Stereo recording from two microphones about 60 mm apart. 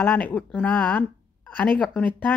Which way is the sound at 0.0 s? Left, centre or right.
Left.